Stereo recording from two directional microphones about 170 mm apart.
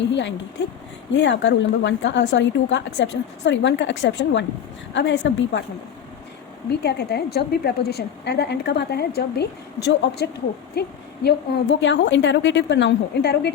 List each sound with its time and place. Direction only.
0.1 s a woman's voice: 90° left
6.8 s a woman's voice: 70° left (ahead or behind)
11.8 s a woman's voice: 90° left